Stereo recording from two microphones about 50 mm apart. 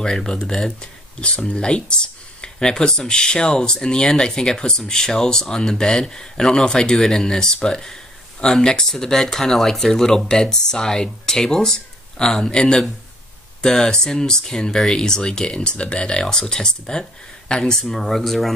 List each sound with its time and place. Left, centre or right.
0.0 s speech: centre